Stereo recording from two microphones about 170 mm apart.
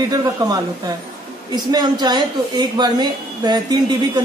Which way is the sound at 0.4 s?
20° right (ahead or behind).